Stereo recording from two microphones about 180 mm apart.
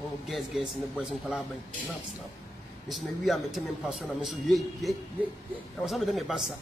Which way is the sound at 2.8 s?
Centre (ahead or behind).